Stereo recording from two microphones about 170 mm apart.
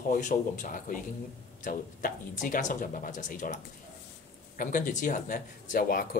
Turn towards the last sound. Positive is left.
turn(degrees=55)  # may be behind; listen again after turning